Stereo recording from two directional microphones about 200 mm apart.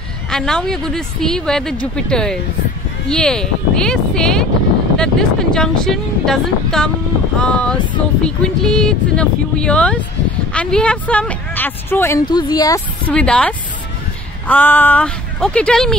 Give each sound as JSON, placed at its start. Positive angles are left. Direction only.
{"t": 0.3, "sound": "speech", "side_deg": 5}
{"t": 12.3, "sound": "speech", "side_deg": 20}
{"t": 13.0, "sound": "speech", "side_deg": 5}